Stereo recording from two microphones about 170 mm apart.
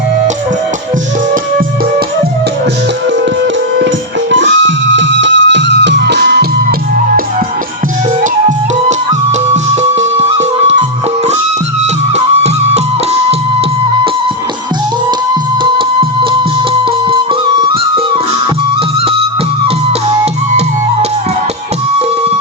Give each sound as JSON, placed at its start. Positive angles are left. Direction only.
{"t": 4.3, "sound": "music", "side_deg": -90}
{"t": 8.2, "sound": "music", "side_deg": -45}
{"t": 10.0, "sound": "music", "side_deg": -40}
{"t": 12.1, "sound": "music", "side_deg": -40}
{"t": 17.1, "sound": "music", "side_deg": -30}